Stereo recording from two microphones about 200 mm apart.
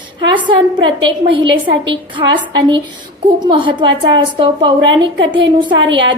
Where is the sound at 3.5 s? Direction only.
25° right (ahead or behind).